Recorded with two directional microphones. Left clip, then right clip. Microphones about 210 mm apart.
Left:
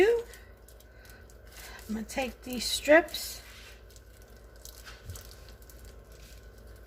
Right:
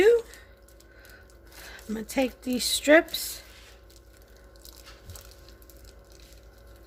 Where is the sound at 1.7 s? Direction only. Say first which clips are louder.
Right 5 dB; 50° right (ahead or behind).